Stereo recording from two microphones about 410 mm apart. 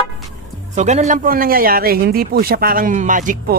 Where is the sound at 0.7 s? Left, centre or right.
Centre.